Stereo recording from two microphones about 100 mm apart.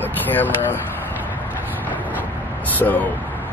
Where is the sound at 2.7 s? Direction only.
15° left (ahead or behind).